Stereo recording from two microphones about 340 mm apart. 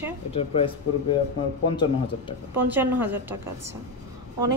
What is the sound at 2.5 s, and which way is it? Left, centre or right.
A woman's voice, centre.